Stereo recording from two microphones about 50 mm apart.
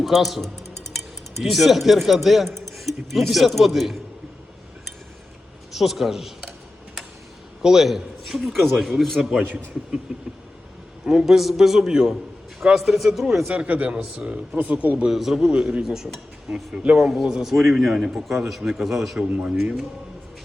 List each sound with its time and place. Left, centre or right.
0.0 s speech: centre
5.7 s speech: centre
7.6 s speech: centre
10.1 s a man's voice: right; by 13.4 s centre
13.5 s speech: right
14.9 s a man's voice: centre
16.7 s speech: right
17.0 s a man's voice: centre
19.4 s speech: right